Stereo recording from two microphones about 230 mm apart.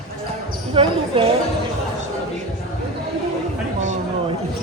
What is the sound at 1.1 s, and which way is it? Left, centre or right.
Speech, right.